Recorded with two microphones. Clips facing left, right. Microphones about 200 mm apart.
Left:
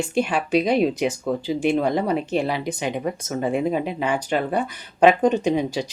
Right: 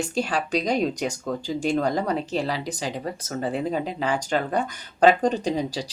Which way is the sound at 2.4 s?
35° right (ahead or behind).